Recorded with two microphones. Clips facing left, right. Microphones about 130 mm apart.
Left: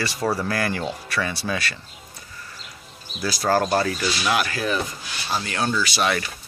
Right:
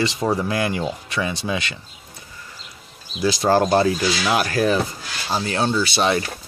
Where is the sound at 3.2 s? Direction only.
25° right (ahead or behind).